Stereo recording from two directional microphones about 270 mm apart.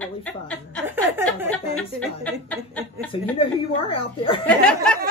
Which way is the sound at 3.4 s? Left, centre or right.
Centre.